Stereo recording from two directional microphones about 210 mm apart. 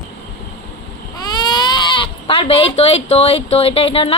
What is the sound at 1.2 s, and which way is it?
Speech, 20° left (ahead or behind).